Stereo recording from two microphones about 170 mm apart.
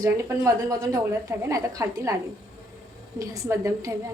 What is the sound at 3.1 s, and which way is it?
Speech, 20° right (ahead or behind).